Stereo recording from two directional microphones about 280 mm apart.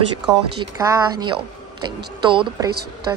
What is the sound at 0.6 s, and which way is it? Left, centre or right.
Speech, centre.